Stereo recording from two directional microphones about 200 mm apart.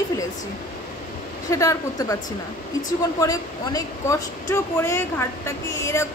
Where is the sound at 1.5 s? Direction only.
15° left (ahead or behind).